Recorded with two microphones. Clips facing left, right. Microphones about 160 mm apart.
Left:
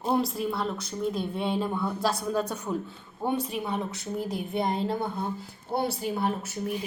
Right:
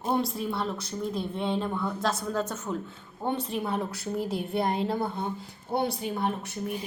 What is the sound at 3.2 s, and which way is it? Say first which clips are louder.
A woman's voice: left 1 dB; centre (ahead or behind).